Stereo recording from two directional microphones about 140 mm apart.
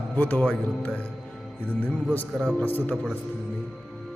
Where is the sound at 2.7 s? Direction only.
15° left (ahead or behind).